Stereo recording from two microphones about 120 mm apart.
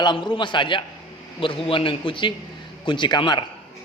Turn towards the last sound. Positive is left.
turn(degrees=40)  # may be behind; listen again after turning